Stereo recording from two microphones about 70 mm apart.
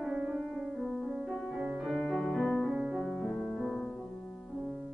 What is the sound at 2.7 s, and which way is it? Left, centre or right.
Music, centre.